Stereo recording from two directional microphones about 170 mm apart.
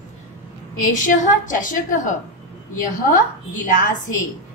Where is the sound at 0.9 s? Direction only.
50° left (ahead or behind).